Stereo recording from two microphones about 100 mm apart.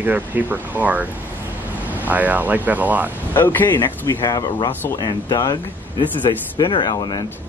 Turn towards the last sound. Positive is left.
turn(degrees=45)  # may be behind; listen again after turning